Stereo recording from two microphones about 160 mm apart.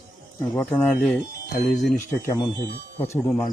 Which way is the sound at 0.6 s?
5° left (ahead or behind).